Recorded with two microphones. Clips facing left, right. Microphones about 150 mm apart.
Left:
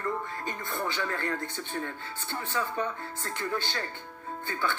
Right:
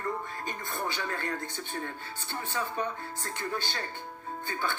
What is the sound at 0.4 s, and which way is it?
Speech, 15° right (ahead or behind).